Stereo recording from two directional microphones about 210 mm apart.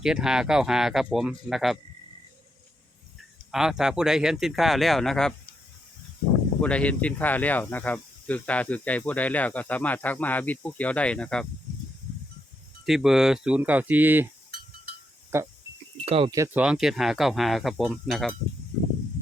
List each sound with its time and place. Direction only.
0.0 s speech: 5° right (ahead or behind)
3.5 s speech: centre (ahead or behind)
6.6 s speech: 5° left (ahead or behind)
12.8 s speech: centre (ahead or behind)
15.3 s speech: 10° right (ahead or behind)
16.0 s speech: 25° right (ahead or behind)
16.3 s speech: 10° right (ahead or behind)